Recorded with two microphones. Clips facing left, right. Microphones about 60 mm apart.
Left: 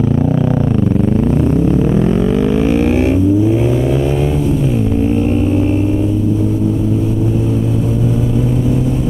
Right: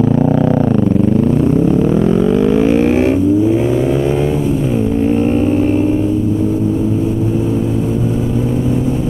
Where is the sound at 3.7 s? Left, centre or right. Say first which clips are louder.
Right 1 dB; centre.